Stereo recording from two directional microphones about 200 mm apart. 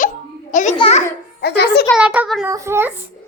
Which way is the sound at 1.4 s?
55° left (ahead or behind).